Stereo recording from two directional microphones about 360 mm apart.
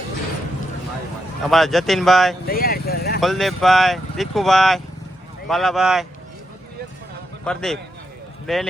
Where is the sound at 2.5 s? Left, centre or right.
Left.